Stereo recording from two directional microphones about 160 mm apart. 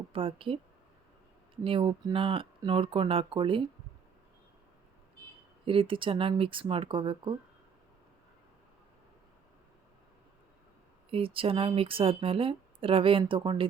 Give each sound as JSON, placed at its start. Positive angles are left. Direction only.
{"t": 0.1, "sound": "speech", "side_deg": -35}
{"t": 1.6, "sound": "speech", "side_deg": -35}
{"t": 5.6, "sound": "speech", "side_deg": -35}
{"t": 11.1, "sound": "speech", "side_deg": -35}